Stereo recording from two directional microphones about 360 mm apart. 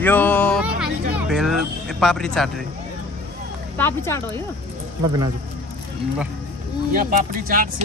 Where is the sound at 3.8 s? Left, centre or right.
Centre.